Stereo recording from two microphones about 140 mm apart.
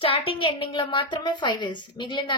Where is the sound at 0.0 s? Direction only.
40° left (ahead or behind).